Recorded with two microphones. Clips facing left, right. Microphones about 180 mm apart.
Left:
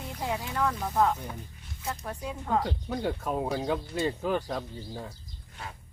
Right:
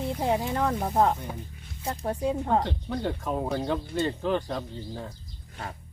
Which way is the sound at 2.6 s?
5° left (ahead or behind).